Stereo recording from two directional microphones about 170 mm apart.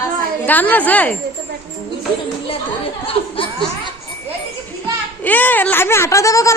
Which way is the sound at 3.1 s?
30° left (ahead or behind).